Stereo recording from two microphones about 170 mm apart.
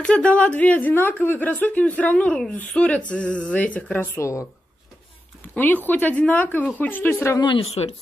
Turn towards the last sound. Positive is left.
turn(degrees=35)  # may be behind; listen again after turning